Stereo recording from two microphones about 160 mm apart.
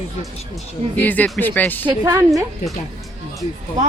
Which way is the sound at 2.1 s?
15° right (ahead or behind).